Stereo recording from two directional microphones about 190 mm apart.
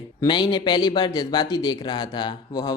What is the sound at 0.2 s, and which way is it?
Speech, 25° left (ahead or behind).